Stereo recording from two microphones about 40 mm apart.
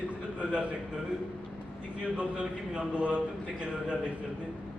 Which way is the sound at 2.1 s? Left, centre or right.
Right.